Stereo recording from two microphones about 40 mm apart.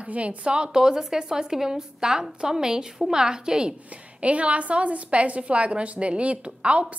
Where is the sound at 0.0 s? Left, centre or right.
Right; by 3.7 s centre.